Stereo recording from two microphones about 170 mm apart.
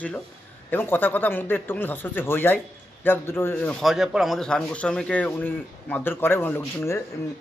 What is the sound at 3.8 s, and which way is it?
Speech, centre (ahead or behind).